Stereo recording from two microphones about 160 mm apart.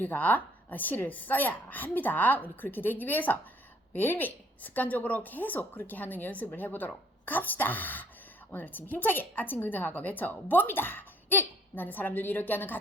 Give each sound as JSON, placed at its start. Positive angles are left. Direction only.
{"t": 0.0, "sound": "a woman's voice", "side_deg": 10}